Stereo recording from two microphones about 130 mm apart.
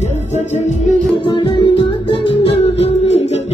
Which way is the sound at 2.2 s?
55° left (ahead or behind).